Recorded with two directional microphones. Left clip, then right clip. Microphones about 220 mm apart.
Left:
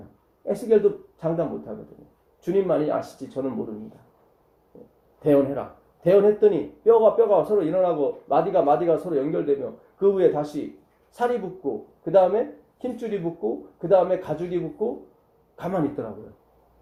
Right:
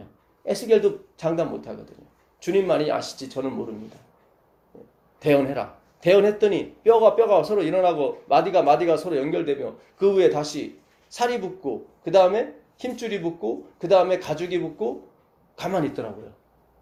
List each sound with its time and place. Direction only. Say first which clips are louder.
1.2 s speech: right 1 dB; 25° right (ahead or behind)
5.2 s speech: even; 25° right (ahead or behind)